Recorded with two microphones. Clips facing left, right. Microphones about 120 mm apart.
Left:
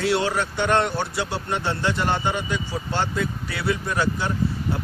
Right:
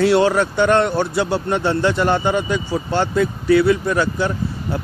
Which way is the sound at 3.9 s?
60° right (ahead or behind).